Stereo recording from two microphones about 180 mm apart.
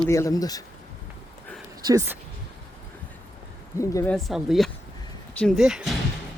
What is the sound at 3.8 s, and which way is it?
Speech, 15° left (ahead or behind).